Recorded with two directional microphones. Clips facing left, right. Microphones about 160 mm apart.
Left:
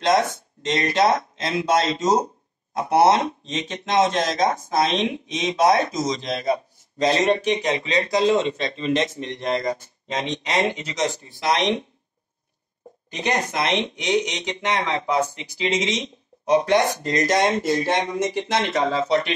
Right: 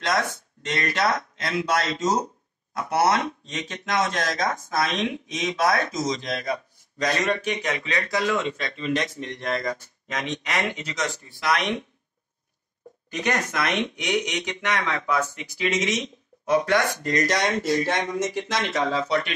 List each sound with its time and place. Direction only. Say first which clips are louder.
0.0 s speech: left 6 dB; 25° left (ahead or behind)
13.1 s speech: left 2 dB; 25° left (ahead or behind)